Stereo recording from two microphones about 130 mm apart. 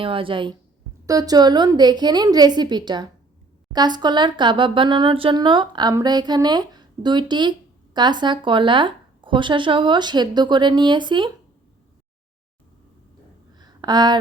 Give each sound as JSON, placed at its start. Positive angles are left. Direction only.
{"t": 0.0, "sound": "a woman's voice", "side_deg": -45}
{"t": 1.0, "sound": "speech", "side_deg": -30}
{"t": 13.6, "sound": "a sound", "side_deg": -30}